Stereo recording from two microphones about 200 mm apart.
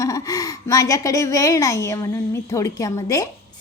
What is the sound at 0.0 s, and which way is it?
A woman's voice, 15° left (ahead or behind).